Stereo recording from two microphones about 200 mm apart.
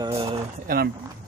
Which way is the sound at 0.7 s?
45° right (ahead or behind).